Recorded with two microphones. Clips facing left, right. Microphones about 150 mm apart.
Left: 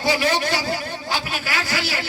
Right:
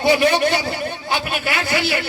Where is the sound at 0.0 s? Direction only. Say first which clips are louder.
Right 5 dB; 60° right (ahead or behind).